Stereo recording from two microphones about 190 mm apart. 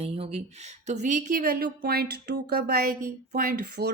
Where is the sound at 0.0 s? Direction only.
30° right (ahead or behind).